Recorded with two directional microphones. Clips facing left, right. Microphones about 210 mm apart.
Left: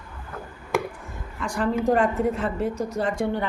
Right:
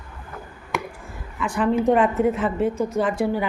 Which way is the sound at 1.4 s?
5° right (ahead or behind).